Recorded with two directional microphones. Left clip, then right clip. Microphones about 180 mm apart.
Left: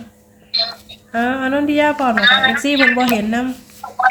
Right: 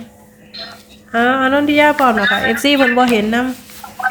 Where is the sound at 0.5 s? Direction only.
55° left (ahead or behind).